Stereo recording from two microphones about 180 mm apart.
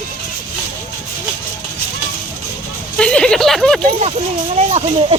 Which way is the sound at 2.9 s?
5° left (ahead or behind).